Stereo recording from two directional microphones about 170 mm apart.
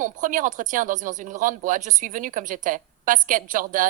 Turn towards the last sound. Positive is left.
turn(degrees=-55)  # may be behind; listen again after turning